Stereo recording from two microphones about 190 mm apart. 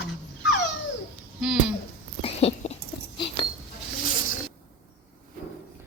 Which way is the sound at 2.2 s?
30° left (ahead or behind).